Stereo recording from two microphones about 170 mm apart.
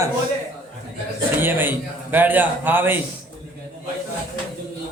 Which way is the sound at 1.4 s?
10° right (ahead or behind).